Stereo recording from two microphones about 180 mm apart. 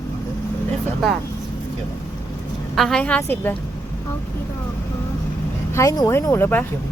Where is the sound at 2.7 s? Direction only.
Centre (ahead or behind).